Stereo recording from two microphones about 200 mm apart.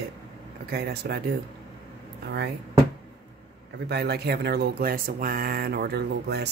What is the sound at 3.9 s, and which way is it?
Speech, 55° right (ahead or behind).